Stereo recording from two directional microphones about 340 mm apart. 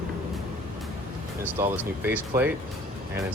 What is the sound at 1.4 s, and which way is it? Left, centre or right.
Speech, centre.